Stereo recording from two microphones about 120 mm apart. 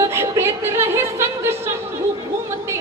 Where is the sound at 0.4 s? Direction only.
20° right (ahead or behind).